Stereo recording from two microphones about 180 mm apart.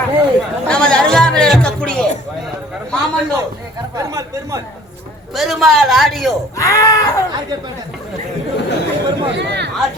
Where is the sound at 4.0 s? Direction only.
15° right (ahead or behind).